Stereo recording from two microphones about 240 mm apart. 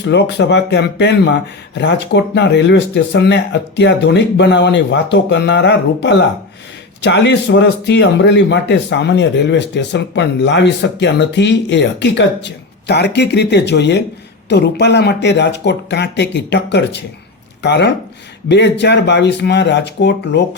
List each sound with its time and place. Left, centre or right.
0.0 s speech: left